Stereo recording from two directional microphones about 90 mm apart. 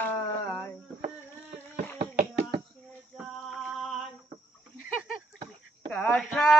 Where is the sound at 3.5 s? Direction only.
Centre (ahead or behind).